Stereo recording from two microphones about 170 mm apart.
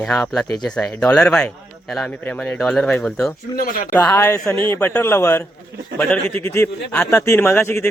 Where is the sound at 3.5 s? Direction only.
60° left (ahead or behind).